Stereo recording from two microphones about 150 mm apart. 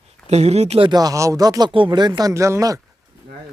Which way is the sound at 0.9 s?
25° right (ahead or behind).